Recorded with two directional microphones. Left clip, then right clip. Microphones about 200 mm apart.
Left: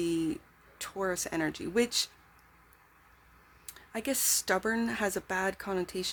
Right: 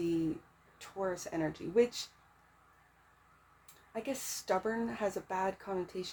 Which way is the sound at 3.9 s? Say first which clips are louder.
Left 7 dB; 40° left (ahead or behind).